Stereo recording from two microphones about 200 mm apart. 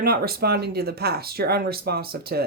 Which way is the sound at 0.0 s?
50° right (ahead or behind).